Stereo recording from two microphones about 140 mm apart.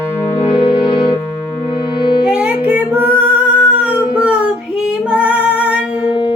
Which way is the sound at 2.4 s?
10° right (ahead or behind).